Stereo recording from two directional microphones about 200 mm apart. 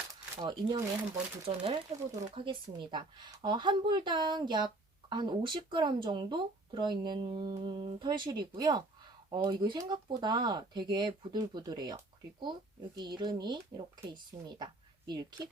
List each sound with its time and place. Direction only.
0.3 s speech: 20° right (ahead or behind)
13.0 s speech: 20° right (ahead or behind)